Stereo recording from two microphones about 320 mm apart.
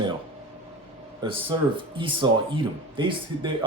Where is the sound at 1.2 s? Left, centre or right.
Centre.